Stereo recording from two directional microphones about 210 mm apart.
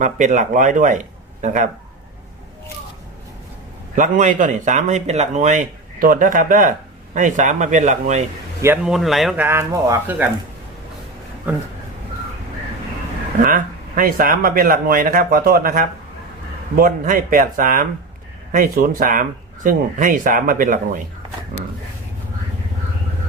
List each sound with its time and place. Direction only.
0.0 s speech: 35° right (ahead or behind)
3.9 s speech: 35° right (ahead or behind)
8.6 s speech: 5° right (ahead or behind)
11.5 s speech: 5° right (ahead or behind)
13.4 s speech: 40° right (ahead or behind)